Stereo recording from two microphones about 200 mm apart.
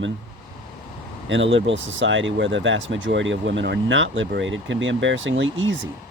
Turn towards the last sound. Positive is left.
turn(degrees=-70)  # may be behind; listen again after turning